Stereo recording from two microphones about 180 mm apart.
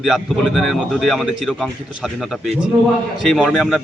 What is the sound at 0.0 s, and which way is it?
A man's voice, centre (ahead or behind).